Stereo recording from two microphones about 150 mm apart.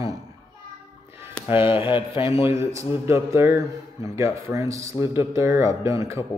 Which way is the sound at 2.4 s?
20° right (ahead or behind).